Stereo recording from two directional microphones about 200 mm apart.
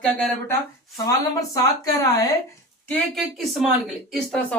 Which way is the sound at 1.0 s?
15° left (ahead or behind).